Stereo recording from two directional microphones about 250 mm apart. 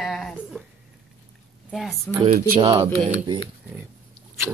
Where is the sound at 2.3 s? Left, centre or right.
Right.